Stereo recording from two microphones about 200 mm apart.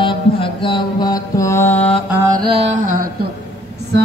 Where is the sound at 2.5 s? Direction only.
30° right (ahead or behind).